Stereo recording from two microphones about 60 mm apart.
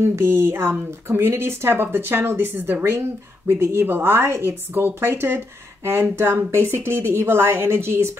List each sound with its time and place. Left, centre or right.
0.0 s speech: right
3.4 s speech: right